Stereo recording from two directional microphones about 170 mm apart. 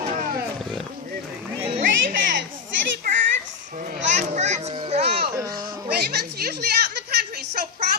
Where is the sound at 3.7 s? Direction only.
55° right (ahead or behind).